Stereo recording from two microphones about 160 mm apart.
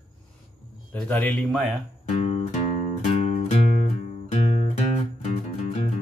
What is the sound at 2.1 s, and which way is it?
Music, 45° left (ahead or behind).